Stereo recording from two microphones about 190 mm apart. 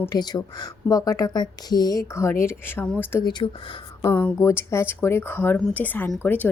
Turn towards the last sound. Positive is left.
turn(degrees=10)  # may be behind; listen again after turning